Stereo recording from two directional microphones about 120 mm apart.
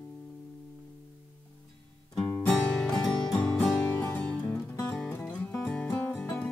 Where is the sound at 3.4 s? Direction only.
10° left (ahead or behind).